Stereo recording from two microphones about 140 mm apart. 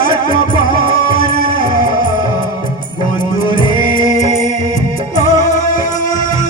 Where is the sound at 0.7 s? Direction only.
75° left (ahead or behind).